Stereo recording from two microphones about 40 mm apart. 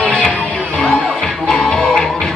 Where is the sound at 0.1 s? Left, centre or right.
Left.